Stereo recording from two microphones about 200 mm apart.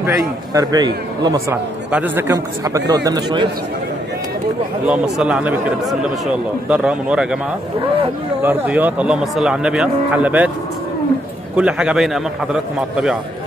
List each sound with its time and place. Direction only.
0.0 s a man's voice: 20° right (ahead or behind)
1.9 s a man's voice: 10° right (ahead or behind)
4.8 s a man's voice: 5° right (ahead or behind)
8.4 s speech: 10° right (ahead or behind)
11.5 s a man's voice: 5° right (ahead or behind)